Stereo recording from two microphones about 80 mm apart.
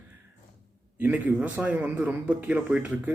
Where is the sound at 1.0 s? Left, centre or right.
Centre.